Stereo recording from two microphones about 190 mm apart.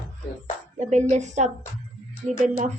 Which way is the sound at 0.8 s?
40° right (ahead or behind).